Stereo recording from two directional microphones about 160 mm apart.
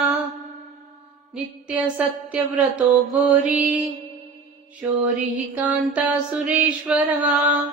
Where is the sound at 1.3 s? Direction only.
10° right (ahead or behind).